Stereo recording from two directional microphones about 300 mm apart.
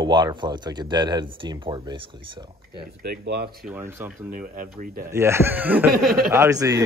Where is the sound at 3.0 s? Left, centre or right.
Right.